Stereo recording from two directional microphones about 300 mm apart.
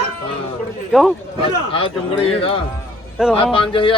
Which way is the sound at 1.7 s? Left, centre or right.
Centre.